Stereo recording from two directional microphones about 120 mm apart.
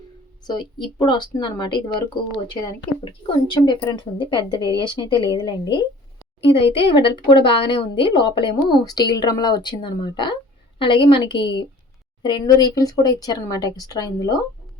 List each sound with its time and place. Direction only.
0.9 s a woman's voice: 40° left (ahead or behind)